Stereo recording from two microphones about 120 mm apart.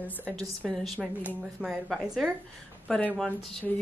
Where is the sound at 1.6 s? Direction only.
Centre (ahead or behind).